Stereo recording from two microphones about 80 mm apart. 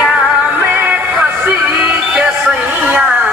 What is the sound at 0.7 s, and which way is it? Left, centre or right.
Music, right.